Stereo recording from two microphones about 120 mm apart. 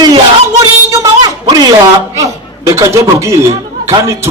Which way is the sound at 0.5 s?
30° right (ahead or behind).